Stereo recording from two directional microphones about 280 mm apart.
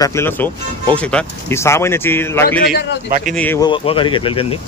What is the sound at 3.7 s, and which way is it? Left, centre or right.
Speech, centre.